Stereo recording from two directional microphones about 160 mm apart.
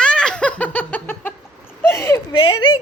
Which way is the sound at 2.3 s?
30° left (ahead or behind).